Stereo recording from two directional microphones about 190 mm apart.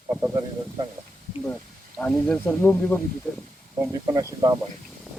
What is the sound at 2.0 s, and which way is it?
Speech, 5° left (ahead or behind).